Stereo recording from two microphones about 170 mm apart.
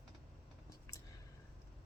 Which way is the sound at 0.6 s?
20° left (ahead or behind).